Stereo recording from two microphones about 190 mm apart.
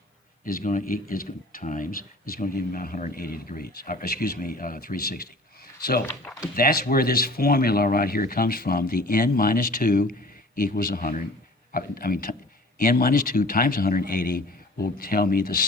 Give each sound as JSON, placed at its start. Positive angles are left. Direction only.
{"t": 0.4, "sound": "a man's voice", "side_deg": 45}
{"t": 6.3, "sound": "speech", "side_deg": 5}
{"t": 6.6, "sound": "a man's voice", "side_deg": 50}